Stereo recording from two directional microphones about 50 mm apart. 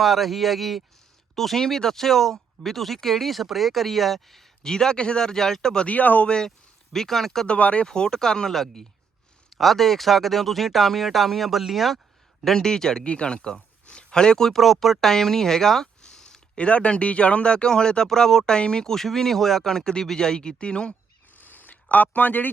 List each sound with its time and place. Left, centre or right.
0.0 s speech: centre
4.6 s speech: centre
5.9 s speech: left
6.2 s speech: centre
7.4 s speech: left
16.6 s speech: left
21.3 s a sound: left